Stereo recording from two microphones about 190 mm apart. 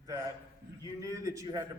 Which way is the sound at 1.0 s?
15° right (ahead or behind).